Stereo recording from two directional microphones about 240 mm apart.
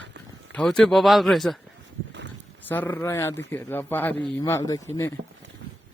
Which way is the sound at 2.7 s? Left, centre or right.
Centre.